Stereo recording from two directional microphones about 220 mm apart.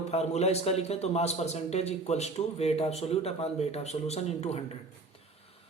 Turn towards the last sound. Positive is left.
turn(degrees=30)  # may be behind; listen again after turning